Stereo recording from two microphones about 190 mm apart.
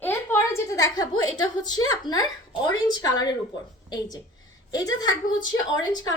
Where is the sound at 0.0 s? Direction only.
10° left (ahead or behind).